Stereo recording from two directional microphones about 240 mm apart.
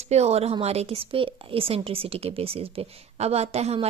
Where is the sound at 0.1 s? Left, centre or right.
Right.